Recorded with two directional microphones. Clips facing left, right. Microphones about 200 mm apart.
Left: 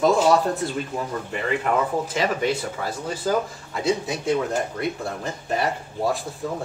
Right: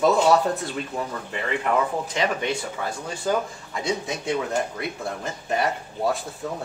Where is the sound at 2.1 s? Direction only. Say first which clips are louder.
Left 2 dB; 5° left (ahead or behind).